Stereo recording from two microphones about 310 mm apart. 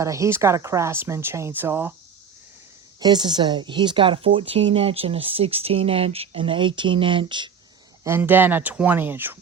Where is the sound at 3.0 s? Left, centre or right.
Centre.